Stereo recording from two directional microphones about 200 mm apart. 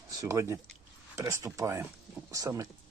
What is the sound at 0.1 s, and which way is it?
Speech, 15° right (ahead or behind).